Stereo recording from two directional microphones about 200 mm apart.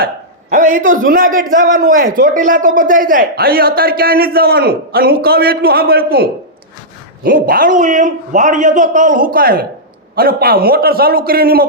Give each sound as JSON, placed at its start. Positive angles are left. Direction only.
{"t": 0.5, "sound": "a man's voice", "side_deg": -40}
{"t": 7.3, "sound": "a man's voice", "side_deg": -45}